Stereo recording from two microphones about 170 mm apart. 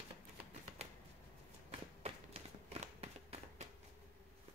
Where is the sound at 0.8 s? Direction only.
40° right (ahead or behind).